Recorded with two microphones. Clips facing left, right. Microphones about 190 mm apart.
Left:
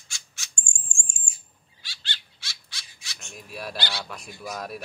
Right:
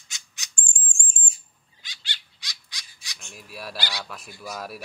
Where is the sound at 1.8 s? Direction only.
15° right (ahead or behind).